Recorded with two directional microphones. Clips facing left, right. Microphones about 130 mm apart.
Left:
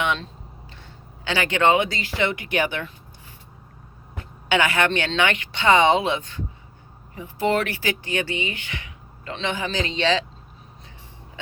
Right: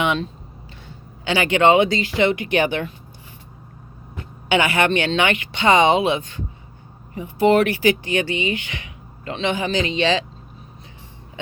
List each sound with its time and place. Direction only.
0.0 s a sound: 10° right (ahead or behind)
1.2 s speech: 15° right (ahead or behind)
4.4 s speech: 15° right (ahead or behind)